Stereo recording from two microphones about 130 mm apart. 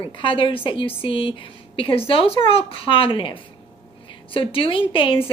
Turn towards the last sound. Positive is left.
turn(degrees=40)  # may be behind; listen again after turning